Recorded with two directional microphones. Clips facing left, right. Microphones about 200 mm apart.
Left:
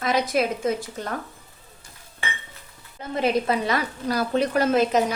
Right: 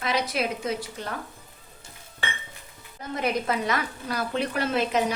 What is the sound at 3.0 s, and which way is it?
Speech, 30° left (ahead or behind).